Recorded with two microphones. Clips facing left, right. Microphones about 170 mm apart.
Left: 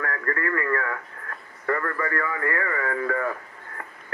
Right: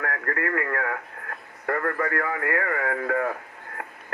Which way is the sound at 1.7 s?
45° right (ahead or behind).